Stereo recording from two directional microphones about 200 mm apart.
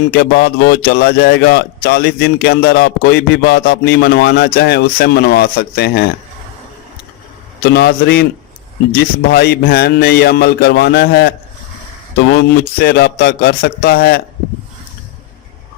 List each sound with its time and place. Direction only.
0.1 s a man's voice: 55° left (ahead or behind)
7.6 s a man's voice: 55° left (ahead or behind)
9.3 s a man's voice: 55° left (ahead or behind)